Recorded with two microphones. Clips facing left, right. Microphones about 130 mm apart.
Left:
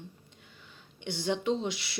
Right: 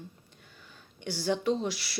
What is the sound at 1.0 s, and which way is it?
Speech, 25° left (ahead or behind).